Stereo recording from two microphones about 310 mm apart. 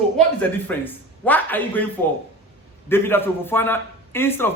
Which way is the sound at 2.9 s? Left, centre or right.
Centre.